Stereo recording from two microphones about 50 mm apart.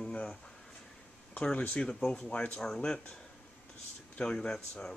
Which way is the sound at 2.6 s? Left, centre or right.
Centre.